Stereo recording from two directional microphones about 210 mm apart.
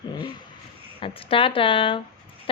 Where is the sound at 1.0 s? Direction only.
25° left (ahead or behind).